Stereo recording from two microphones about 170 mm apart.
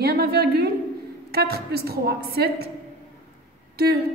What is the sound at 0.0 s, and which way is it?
A woman's voice, 70° right (ahead or behind).